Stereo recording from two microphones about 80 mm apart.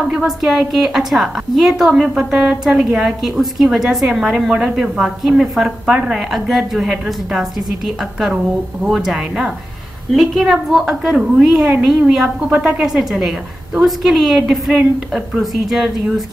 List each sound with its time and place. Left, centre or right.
0.1 s a woman's voice: centre